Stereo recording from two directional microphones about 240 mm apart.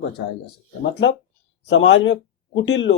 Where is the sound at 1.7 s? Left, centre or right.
Left.